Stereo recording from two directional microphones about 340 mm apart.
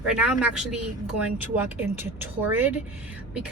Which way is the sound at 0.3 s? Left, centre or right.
Centre.